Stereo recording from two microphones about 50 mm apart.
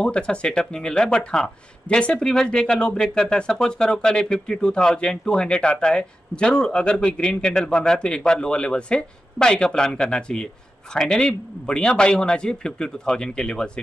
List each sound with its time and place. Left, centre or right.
0.0 s speech: left